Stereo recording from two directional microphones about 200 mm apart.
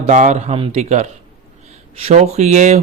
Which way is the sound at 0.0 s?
40° right (ahead or behind).